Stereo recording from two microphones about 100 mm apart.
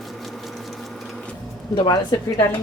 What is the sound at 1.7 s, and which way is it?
Speech, 45° left (ahead or behind).